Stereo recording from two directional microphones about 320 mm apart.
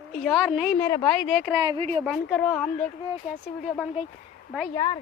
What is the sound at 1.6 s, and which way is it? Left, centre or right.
Speech, centre.